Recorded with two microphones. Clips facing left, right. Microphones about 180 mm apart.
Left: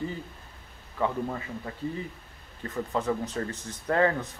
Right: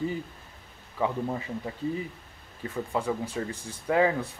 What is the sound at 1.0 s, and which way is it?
Speech, 10° right (ahead or behind).